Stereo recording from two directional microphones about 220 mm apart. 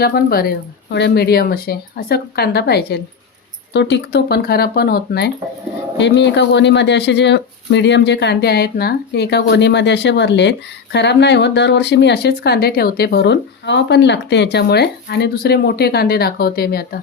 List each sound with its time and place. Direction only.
0.0 s speech: 40° left (ahead or behind)